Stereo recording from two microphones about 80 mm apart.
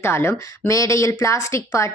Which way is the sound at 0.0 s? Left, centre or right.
Left.